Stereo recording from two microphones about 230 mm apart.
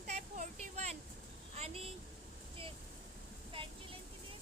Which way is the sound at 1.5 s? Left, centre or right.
Right.